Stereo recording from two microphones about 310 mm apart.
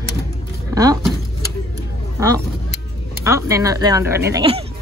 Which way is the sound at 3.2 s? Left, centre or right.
Centre.